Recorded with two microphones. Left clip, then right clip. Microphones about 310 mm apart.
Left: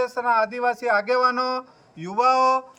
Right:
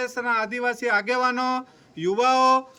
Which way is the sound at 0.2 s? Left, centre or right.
Centre.